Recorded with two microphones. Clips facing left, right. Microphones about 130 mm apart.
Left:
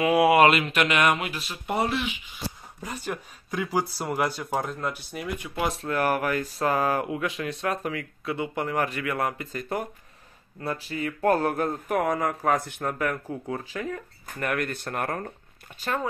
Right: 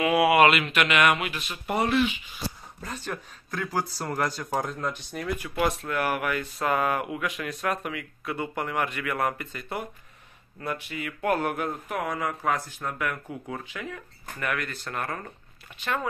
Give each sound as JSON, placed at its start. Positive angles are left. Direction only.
{"t": 0.1, "sound": "speech", "side_deg": 40}
{"t": 2.8, "sound": "speech", "side_deg": 10}
{"t": 5.4, "sound": "speech", "side_deg": 20}
{"t": 5.8, "sound": "speech", "side_deg": 35}
{"t": 9.5, "sound": "speech", "side_deg": 40}